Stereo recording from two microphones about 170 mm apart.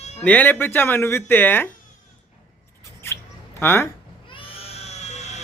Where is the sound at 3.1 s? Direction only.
15° left (ahead or behind).